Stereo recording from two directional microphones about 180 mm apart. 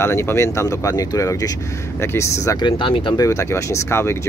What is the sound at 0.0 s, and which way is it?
Speech, 15° left (ahead or behind).